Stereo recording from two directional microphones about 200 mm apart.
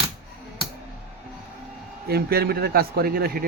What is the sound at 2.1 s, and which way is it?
A man's voice, 50° right (ahead or behind).